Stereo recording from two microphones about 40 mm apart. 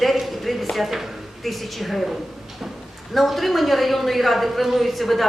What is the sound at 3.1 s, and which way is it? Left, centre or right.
A woman's voice, centre.